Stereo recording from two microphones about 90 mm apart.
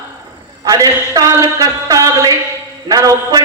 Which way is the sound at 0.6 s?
45° right (ahead or behind).